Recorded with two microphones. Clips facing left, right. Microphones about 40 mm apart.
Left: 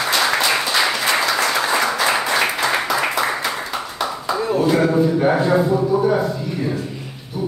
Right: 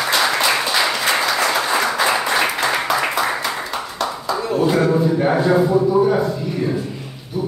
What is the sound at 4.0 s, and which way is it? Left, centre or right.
Clapping, centre.